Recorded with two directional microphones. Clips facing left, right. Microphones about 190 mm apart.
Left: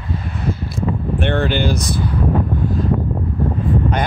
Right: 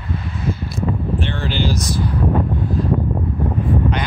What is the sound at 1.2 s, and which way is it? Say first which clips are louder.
Speech: left 4 dB; 55° left (ahead or behind).